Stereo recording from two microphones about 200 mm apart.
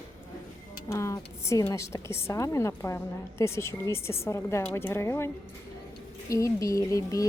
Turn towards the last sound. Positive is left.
turn(degrees=15)  # may be behind; listen again after turning